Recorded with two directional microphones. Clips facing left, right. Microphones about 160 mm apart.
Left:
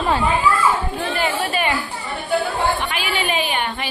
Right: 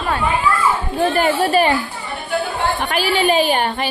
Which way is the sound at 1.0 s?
40° right (ahead or behind).